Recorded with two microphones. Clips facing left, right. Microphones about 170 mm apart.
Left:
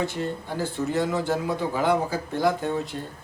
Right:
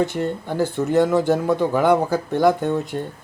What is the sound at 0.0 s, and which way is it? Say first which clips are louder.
Speech: right 6 dB; 60° right (ahead or behind).